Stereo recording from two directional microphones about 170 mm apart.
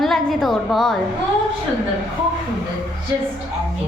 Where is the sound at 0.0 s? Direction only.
Centre (ahead or behind).